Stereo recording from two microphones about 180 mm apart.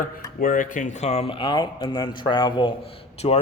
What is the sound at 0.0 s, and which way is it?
Speech, 50° left (ahead or behind).